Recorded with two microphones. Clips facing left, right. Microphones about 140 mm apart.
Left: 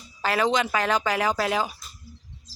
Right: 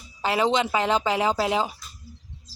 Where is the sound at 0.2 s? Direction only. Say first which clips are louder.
Right 1 dB; 20° right (ahead or behind).